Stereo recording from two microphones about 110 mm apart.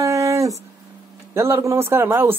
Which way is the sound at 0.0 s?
30° right (ahead or behind).